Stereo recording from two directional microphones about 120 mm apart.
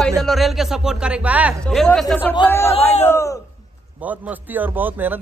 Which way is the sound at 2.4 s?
20° left (ahead or behind).